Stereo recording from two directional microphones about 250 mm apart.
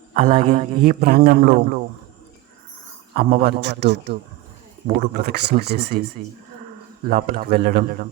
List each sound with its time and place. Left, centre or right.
0.1 s a man's voice: right
3.2 s a man's voice: right
7.1 s a man's voice: right